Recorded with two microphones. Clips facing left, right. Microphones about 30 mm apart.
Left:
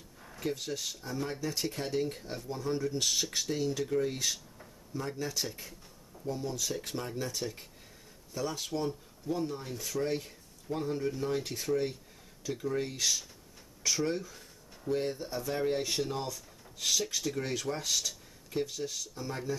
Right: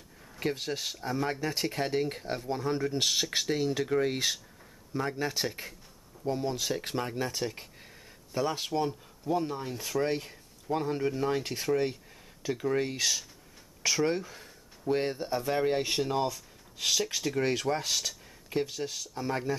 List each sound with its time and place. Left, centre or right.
0.4 s speech: right; by 19.0 s centre
19.1 s speech: right